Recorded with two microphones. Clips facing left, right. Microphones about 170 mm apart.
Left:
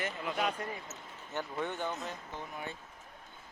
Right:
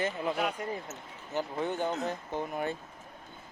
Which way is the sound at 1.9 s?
55° right (ahead or behind).